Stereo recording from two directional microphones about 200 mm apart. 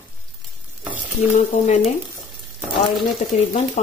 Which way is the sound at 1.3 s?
35° left (ahead or behind).